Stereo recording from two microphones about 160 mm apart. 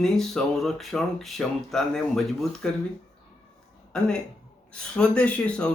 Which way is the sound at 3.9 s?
5° left (ahead or behind).